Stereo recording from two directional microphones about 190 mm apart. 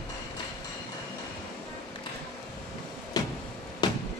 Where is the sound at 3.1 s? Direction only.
20° left (ahead or behind).